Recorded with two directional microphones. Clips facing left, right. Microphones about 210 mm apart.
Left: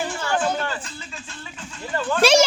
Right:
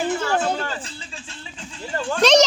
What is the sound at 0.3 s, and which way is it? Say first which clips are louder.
Music: even; 30° right (ahead or behind).